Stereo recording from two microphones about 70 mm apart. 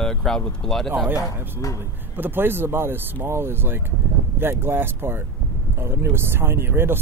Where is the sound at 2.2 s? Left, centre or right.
Right.